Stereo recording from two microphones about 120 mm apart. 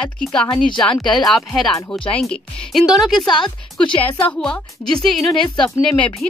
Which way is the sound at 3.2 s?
40° left (ahead or behind).